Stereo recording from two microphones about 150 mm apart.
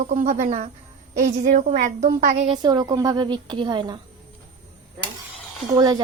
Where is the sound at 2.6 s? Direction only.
30° right (ahead or behind).